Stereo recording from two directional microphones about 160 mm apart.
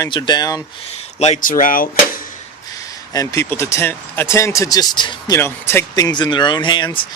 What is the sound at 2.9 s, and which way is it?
Speech, 20° left (ahead or behind).